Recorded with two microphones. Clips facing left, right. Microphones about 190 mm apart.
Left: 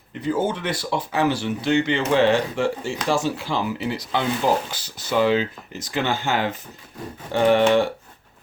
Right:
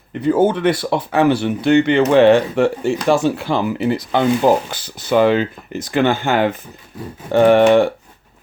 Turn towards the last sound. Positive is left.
turn(degrees=-55)  # may be behind; listen again after turning